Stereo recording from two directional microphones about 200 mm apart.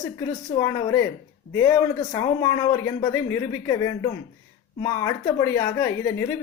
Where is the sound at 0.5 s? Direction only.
15° left (ahead or behind).